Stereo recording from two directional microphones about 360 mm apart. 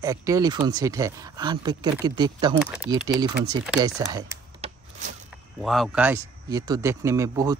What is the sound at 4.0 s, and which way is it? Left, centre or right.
Computer keyboard, centre.